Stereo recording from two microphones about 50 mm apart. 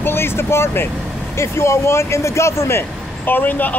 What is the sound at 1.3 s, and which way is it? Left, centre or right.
Speech, left.